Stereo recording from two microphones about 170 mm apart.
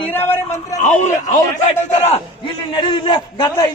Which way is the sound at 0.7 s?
45° left (ahead or behind).